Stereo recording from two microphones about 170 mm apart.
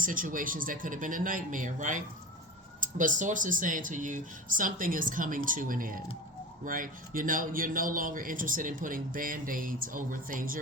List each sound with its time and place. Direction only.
0.0 s speech: 55° right (ahead or behind)